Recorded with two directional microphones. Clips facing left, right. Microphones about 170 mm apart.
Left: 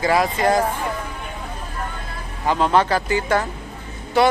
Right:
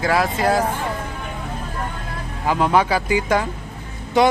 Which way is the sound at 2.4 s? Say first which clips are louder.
Even; 10° right (ahead or behind).